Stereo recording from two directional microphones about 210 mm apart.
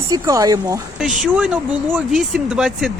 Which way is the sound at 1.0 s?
5° right (ahead or behind).